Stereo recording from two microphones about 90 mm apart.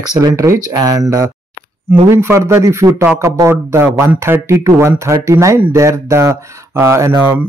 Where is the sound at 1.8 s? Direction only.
25° right (ahead or behind).